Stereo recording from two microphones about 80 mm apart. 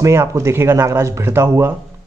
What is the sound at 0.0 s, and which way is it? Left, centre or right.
Speech, right.